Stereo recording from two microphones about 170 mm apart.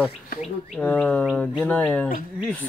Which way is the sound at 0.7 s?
5° left (ahead or behind).